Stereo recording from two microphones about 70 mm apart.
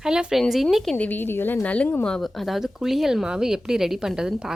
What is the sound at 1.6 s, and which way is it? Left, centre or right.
Speech, left.